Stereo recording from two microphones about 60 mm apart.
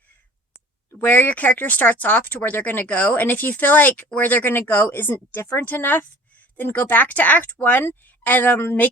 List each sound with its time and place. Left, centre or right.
0.9 s speech: left
5.3 s a woman's voice: left
5.6 s a woman's voice: left